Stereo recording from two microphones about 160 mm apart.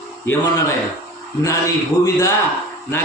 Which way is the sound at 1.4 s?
20° left (ahead or behind).